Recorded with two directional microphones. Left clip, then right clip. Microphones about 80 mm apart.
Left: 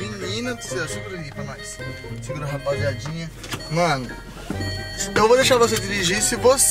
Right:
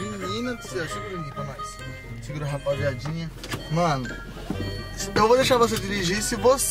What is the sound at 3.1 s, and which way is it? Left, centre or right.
Speech, centre.